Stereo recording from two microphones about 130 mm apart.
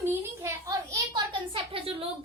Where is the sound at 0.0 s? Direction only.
20° right (ahead or behind).